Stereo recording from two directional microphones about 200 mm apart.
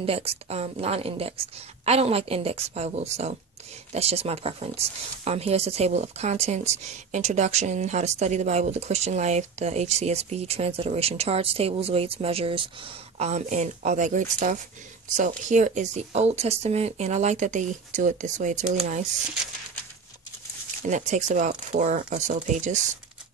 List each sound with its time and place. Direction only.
0.0 s speech: 30° right (ahead or behind)
20.8 s speech: 35° right (ahead or behind)